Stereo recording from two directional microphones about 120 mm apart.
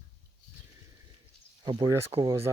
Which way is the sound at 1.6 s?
35° right (ahead or behind).